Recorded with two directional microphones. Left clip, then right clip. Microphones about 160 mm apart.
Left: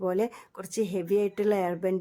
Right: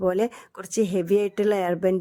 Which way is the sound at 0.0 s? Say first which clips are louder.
Right 5 dB; 25° right (ahead or behind).